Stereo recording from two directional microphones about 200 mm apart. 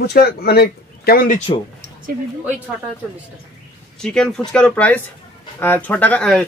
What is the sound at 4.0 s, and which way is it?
Speech, 5° left (ahead or behind).